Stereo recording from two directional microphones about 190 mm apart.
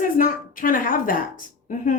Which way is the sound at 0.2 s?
45° left (ahead or behind).